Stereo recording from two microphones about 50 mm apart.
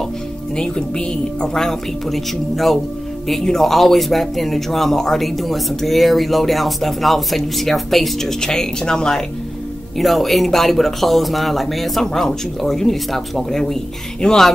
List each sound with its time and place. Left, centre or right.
0.6 s a woman's voice: centre
1.6 s speech: centre
9.9 s a woman's voice: centre